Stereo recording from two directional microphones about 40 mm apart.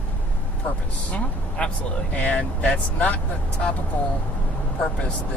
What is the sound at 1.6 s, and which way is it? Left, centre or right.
Speech, left.